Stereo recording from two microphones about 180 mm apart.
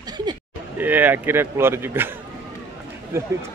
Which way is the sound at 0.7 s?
10° right (ahead or behind).